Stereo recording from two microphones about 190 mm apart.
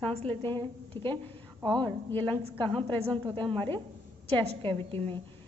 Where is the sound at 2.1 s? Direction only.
10° left (ahead or behind).